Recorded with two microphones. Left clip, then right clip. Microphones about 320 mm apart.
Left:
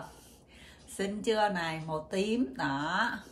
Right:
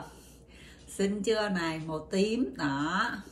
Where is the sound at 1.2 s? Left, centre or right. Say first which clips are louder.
Left 3 dB; centre.